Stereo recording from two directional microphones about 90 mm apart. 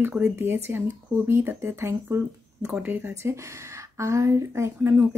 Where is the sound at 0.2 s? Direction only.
25° right (ahead or behind).